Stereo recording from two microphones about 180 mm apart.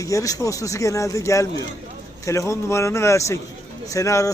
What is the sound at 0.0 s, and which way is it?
A man's voice, 20° left (ahead or behind).